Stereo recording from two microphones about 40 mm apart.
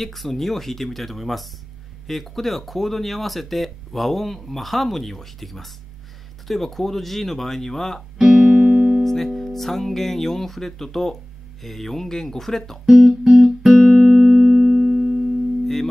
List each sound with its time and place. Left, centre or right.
0.0 s speech: centre
8.2 s music: centre
8.5 s music: right
9.0 s speech: centre
12.8 s speech: centre
13.7 s music: centre